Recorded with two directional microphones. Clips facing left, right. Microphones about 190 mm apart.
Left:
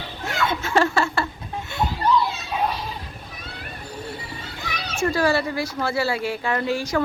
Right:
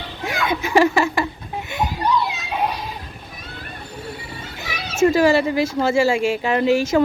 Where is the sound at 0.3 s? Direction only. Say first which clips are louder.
Right 2 dB; 15° right (ahead or behind).